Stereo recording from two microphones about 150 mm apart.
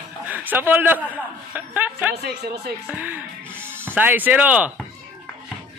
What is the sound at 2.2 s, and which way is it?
Speech, 90° right.